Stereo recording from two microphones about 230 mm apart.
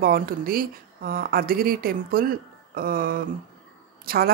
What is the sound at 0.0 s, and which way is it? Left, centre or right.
Speech, right.